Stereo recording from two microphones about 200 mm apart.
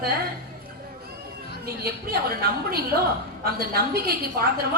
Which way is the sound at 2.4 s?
50° right (ahead or behind).